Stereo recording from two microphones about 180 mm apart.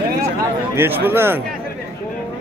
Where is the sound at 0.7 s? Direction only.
10° right (ahead or behind).